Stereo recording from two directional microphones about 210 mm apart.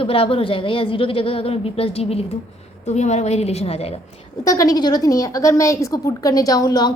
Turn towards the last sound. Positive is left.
turn(degrees=20)  # may be behind; listen again after turning